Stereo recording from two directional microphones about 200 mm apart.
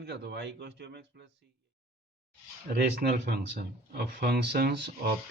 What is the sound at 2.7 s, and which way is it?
Speech, 50° right (ahead or behind).